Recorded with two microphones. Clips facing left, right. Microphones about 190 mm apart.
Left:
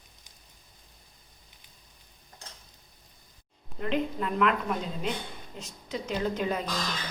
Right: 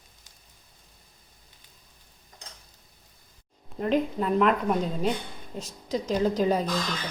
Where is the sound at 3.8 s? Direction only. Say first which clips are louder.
Right 4 dB; 40° right (ahead or behind).